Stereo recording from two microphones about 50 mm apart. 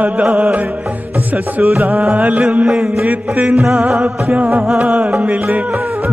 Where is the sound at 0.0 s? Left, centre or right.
Right.